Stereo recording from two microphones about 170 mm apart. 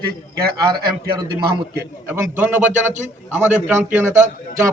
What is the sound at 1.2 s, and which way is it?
A man's voice, 20° right (ahead or behind).